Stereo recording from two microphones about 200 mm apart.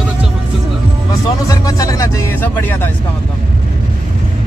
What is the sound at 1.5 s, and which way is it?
Speech, 15° left (ahead or behind).